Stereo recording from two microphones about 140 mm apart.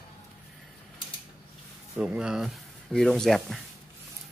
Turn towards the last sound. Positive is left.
turn(degrees=5)  # may be behind; listen again after turning